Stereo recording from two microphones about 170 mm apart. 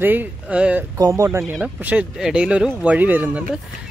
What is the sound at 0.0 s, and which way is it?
Speech, 10° right (ahead or behind).